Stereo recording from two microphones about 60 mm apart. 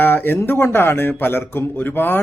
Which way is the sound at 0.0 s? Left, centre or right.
Left.